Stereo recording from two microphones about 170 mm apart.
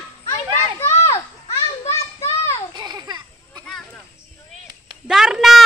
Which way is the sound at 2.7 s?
25° right (ahead or behind).